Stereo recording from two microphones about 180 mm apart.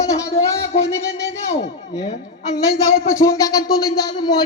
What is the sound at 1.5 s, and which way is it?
Speech, 40° left (ahead or behind).